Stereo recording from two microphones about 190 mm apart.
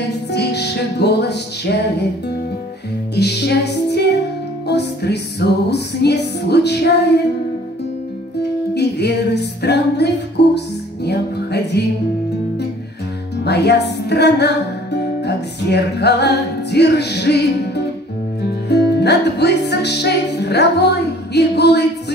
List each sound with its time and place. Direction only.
0.3 s music: 60° left (ahead or behind)
8.7 s music: 60° left (ahead or behind)
13.4 s music: 60° left (ahead or behind)